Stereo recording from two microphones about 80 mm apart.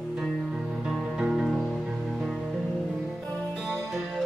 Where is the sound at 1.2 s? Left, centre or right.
Centre.